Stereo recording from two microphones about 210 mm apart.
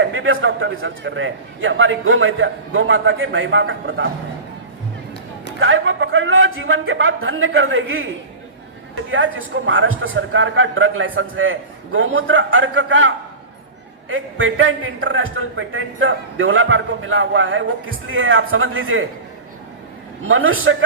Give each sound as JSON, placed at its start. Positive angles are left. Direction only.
{"t": 0.0, "sound": "a man's voice", "side_deg": -65}
{"t": 5.5, "sound": "a man's voice", "side_deg": -65}
{"t": 9.0, "sound": "a man's voice", "side_deg": -70}
{"t": 20.2, "sound": "a man's voice", "side_deg": -70}